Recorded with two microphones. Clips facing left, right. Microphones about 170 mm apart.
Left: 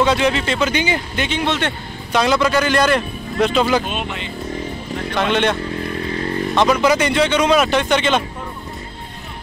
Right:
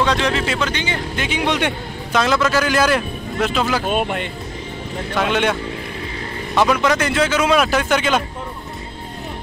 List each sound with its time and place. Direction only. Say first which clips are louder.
0.0 s speech: left 2 dB; 5° left (ahead or behind)
0.7 s speech: left 4 dB; 10° left (ahead or behind)
1.1 s speech: left 1 dB; 5° right (ahead or behind)
1.4 s speech: right 2 dB; 15° right (ahead or behind)
2.1 s speech: left 1 dB; centre (ahead or behind)
3.8 s speech: right 5 dB; 50° right (ahead or behind)
5.1 s speech: left 1 dB; 5° right (ahead or behind)
6.7 s speech: left 2 dB; 5° left (ahead or behind)